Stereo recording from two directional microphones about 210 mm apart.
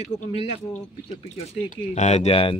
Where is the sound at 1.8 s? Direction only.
30° left (ahead or behind).